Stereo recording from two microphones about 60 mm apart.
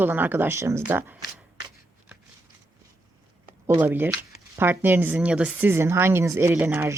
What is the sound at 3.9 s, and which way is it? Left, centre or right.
Speech, right.